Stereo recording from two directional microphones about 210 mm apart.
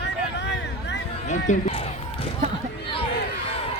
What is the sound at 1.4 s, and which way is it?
Speech, 30° left (ahead or behind).